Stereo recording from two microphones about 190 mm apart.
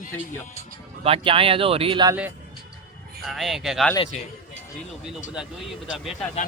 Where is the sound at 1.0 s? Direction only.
30° right (ahead or behind).